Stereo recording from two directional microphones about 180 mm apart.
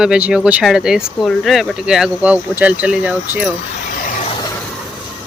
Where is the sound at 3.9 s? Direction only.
50° left (ahead or behind).